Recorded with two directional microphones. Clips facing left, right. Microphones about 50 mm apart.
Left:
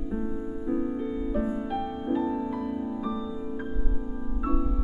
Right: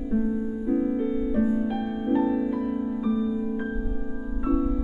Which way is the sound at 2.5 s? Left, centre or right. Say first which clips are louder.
Right 4 dB; right.